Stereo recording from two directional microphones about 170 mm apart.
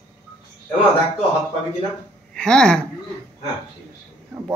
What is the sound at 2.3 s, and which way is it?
Speech, 5° left (ahead or behind).